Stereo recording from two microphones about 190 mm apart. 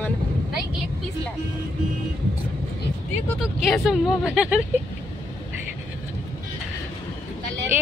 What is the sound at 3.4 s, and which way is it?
Speech, centre (ahead or behind).